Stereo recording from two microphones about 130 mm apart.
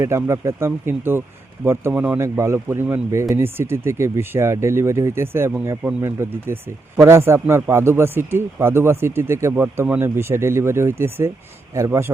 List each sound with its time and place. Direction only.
0.0 s speech: 20° right (ahead or behind)